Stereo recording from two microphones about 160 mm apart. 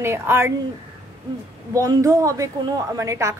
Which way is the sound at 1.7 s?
20° right (ahead or behind).